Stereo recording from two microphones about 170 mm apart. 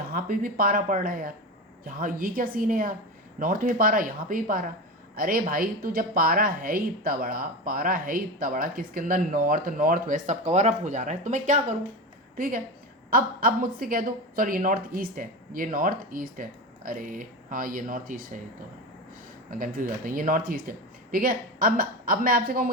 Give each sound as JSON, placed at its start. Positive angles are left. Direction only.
{"t": 0.1, "sound": "a woman's voice", "side_deg": -55}
{"t": 12.4, "sound": "a woman's voice", "side_deg": -55}
{"t": 19.5, "sound": "a woman's voice", "side_deg": -55}